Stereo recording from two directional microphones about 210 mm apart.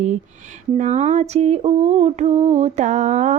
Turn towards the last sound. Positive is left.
turn(degrees=-35)  # may be behind; listen again after turning